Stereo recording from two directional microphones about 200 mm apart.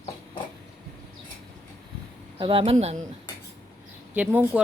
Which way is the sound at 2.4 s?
25° right (ahead or behind).